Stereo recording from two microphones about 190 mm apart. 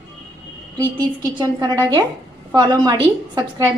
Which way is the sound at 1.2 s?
20° right (ahead or behind).